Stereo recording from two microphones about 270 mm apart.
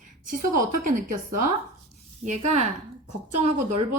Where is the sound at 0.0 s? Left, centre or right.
Right.